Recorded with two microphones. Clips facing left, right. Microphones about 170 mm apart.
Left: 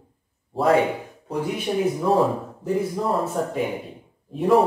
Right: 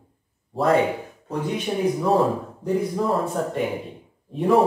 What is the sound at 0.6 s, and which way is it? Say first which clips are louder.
Speech: even; centre (ahead or behind).